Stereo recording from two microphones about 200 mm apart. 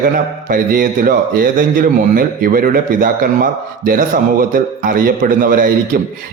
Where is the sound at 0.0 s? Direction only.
45° right (ahead or behind).